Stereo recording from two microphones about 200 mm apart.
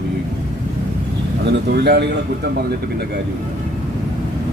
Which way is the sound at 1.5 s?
55° right (ahead or behind).